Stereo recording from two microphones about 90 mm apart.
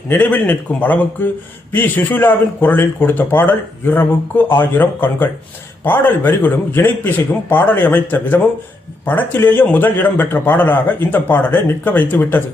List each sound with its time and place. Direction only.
0.1 s speech: 20° left (ahead or behind)